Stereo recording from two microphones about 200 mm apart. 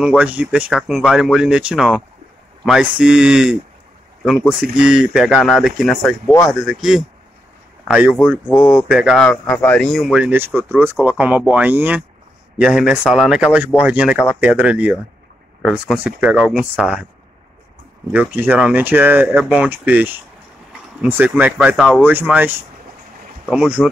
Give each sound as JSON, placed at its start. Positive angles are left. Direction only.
{"t": 0.0, "sound": "speech", "side_deg": -5}
{"t": 18.1, "sound": "speech", "side_deg": -10}